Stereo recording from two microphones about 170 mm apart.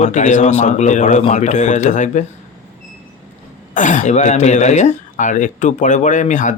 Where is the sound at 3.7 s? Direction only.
45° left (ahead or behind).